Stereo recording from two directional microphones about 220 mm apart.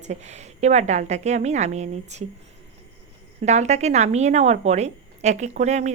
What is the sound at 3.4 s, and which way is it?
A woman's voice, 30° right (ahead or behind).